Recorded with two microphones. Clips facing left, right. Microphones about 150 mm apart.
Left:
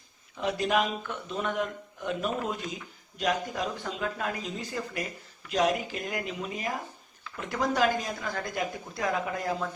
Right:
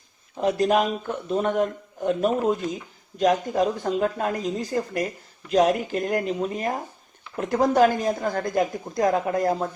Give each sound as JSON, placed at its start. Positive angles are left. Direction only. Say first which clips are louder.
{"t": 0.3, "sound": "speech", "louder": "right 6 dB", "side_deg": -40}